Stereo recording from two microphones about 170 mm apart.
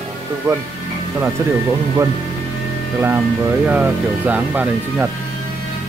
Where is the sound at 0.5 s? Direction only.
15° right (ahead or behind).